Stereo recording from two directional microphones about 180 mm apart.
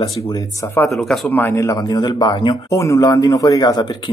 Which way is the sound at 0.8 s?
Centre (ahead or behind).